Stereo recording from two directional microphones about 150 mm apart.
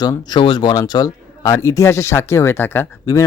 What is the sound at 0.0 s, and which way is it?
Speech, 25° left (ahead or behind).